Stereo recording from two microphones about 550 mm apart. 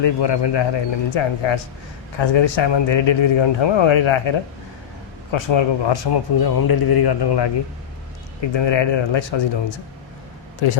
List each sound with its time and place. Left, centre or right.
0.0 s speech: left